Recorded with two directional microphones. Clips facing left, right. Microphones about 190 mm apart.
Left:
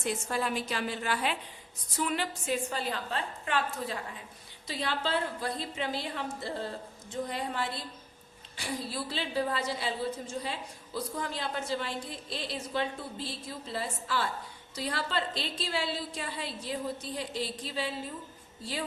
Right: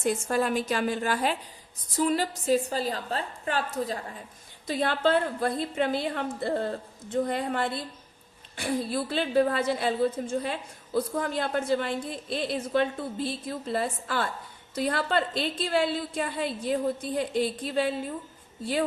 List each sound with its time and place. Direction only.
0.0 s a woman's voice: 45° right (ahead or behind)
4.6 s a woman's voice: 50° right (ahead or behind)